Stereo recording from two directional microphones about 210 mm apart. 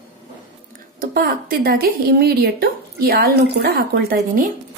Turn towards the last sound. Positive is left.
turn(degrees=-45)  # may be behind; listen again after turning